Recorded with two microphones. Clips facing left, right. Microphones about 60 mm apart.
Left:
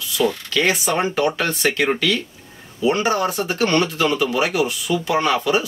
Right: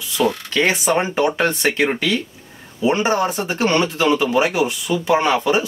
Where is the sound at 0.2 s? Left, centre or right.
Right.